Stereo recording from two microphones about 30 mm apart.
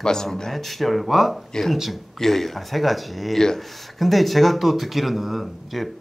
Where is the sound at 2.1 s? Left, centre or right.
Centre.